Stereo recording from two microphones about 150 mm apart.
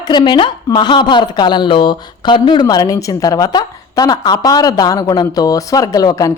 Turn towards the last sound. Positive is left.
turn(degrees=25)  # may be behind; listen again after turning